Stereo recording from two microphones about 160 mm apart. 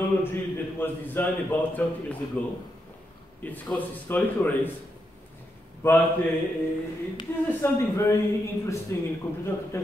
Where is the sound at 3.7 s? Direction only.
10° left (ahead or behind).